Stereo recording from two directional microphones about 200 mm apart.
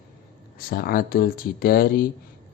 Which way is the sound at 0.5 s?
45° left (ahead or behind).